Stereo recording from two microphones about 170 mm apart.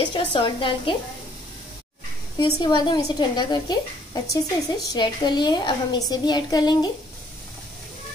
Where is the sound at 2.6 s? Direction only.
25° left (ahead or behind).